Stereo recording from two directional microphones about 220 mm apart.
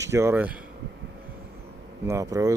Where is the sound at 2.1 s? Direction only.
15° right (ahead or behind).